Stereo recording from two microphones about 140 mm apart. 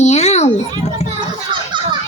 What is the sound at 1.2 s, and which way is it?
Children playing, 35° right (ahead or behind).